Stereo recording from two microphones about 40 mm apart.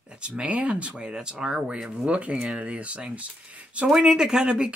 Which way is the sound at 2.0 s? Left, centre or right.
Right.